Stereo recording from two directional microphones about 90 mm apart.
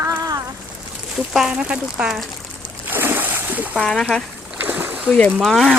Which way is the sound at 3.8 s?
10° left (ahead or behind).